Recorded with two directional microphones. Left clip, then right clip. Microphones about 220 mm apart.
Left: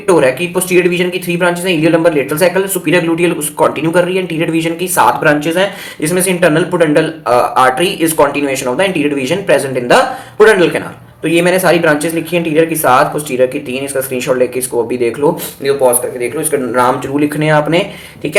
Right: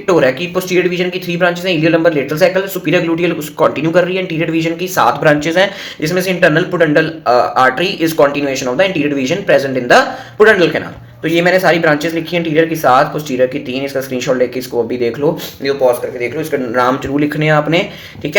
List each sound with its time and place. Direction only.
0.1 s speech: 10° right (ahead or behind)
5.2 s speech: 25° right (ahead or behind)
6.0 s speech: 10° right (ahead or behind)
16.8 s speech: 10° right (ahead or behind)